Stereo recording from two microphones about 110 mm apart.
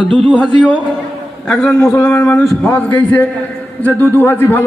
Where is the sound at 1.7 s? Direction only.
25° left (ahead or behind).